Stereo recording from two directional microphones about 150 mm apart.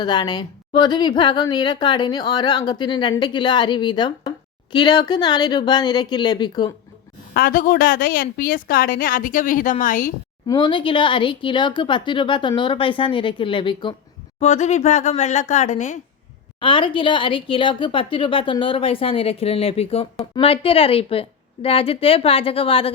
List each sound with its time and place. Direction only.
0.0 s a woman's voice: 30° left (ahead or behind)
7.3 s a woman's voice: 70° left (ahead or behind)
10.4 s a woman's voice: 30° left (ahead or behind)
14.3 s speech: 50° left (ahead or behind)
16.6 s a woman's voice: 35° left (ahead or behind)